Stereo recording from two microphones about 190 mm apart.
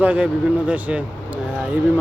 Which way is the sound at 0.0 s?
5° right (ahead or behind).